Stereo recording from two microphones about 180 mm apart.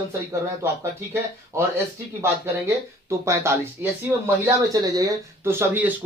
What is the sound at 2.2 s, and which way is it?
Speech, 15° right (ahead or behind).